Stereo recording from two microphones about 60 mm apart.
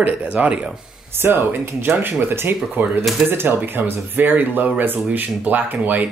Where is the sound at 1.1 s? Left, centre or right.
Right.